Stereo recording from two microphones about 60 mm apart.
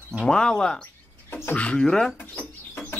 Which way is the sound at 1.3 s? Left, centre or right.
Left.